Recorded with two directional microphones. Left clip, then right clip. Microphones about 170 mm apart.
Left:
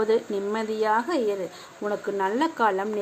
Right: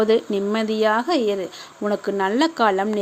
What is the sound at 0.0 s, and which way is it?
A woman's voice, 50° right (ahead or behind).